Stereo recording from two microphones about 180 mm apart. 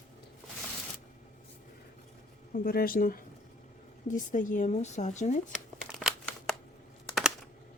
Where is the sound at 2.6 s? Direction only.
55° left (ahead or behind).